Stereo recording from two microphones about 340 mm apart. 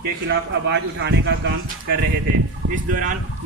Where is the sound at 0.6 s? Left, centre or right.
Right.